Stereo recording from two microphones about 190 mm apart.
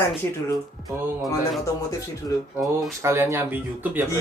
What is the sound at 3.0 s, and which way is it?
Speech, 15° right (ahead or behind).